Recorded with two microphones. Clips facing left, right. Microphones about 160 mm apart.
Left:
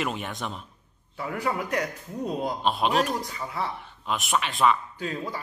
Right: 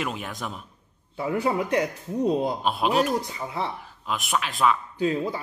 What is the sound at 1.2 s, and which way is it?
A man's voice, 25° right (ahead or behind).